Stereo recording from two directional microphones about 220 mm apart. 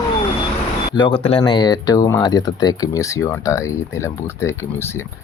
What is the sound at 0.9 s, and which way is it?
Speech, 20° left (ahead or behind).